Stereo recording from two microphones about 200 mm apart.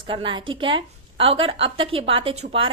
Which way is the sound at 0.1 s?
25° right (ahead or behind).